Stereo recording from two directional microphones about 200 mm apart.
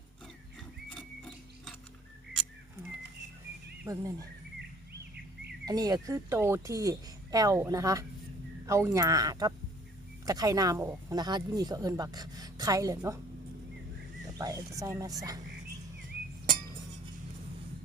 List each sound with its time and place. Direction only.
0.9 s ratchet: centre (ahead or behind)
3.8 s speech: 15° right (ahead or behind)
5.6 s speech: 20° right (ahead or behind)
14.3 s speech: 15° right (ahead or behind)